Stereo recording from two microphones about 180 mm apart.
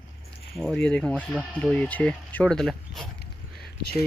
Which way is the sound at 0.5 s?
5° left (ahead or behind).